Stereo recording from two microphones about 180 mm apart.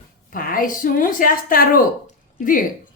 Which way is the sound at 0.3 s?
50° left (ahead or behind).